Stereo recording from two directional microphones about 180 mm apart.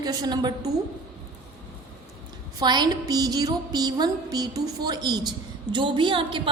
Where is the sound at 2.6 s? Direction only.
25° right (ahead or behind).